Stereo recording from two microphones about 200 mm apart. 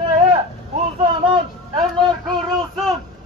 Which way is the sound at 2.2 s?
Centre (ahead or behind).